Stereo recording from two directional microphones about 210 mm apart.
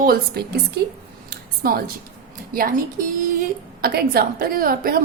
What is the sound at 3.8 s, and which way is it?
A woman's voice, 45° right (ahead or behind).